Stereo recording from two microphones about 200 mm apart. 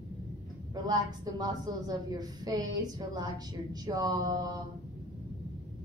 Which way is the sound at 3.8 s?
20° right (ahead or behind).